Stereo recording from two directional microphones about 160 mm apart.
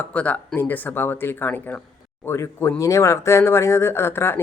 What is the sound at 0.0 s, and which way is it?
Speech, 10° left (ahead or behind).